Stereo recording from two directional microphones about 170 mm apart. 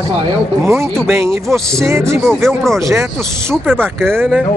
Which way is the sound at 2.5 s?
Centre (ahead or behind).